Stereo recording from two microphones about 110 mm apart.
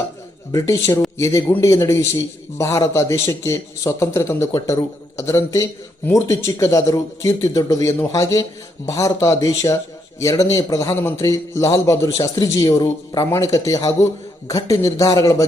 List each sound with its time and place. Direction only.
0.5 s a man's voice: 30° left (ahead or behind)